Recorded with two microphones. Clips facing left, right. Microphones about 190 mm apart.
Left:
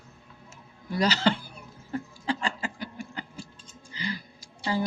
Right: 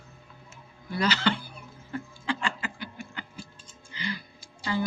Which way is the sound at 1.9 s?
40° left (ahead or behind).